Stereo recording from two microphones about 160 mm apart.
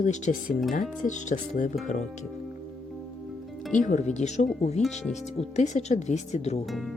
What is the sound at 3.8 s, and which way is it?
Speech, 45° left (ahead or behind).